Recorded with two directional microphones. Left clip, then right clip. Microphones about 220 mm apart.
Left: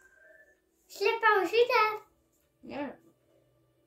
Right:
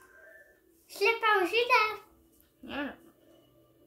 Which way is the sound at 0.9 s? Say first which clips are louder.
Even; 15° left (ahead or behind).